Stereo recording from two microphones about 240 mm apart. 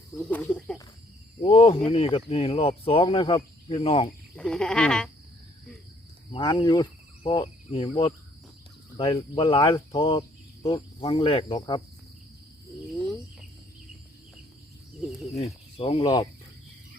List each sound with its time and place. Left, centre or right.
0.2 s frog: centre
1.4 s speech: left
4.4 s frog: centre
6.3 s speech: left
15.8 s speech: left